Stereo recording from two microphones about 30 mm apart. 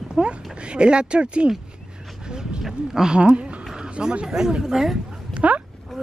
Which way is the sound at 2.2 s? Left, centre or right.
Right.